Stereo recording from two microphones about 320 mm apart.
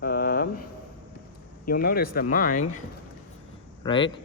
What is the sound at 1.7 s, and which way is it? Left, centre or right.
Speech, left.